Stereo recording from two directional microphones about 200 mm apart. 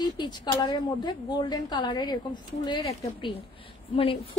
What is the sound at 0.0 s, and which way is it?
A woman's voice, 20° left (ahead or behind).